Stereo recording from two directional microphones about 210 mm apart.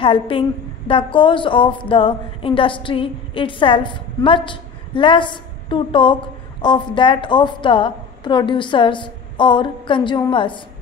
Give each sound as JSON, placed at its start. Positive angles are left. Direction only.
{"t": 0.0, "sound": "a woman's voice", "side_deg": 25}